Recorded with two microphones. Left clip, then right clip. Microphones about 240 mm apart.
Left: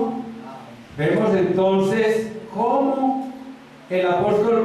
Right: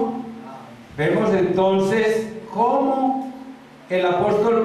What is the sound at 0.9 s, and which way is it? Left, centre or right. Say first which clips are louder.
A man's voice: even; centre.